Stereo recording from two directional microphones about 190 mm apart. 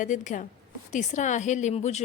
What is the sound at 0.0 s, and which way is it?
A woman's voice, 40° left (ahead or behind).